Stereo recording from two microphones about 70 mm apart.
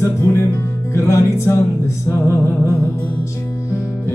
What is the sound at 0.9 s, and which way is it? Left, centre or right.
Speech, left.